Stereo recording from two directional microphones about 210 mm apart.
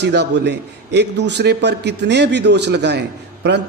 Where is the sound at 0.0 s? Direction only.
55° right (ahead or behind).